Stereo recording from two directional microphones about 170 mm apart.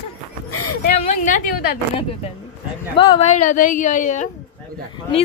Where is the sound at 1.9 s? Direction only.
35° left (ahead or behind).